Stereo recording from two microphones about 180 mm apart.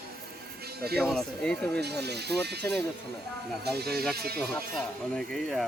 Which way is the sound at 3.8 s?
60° right (ahead or behind).